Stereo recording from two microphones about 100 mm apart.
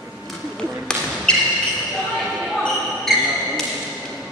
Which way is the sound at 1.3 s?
10° left (ahead or behind).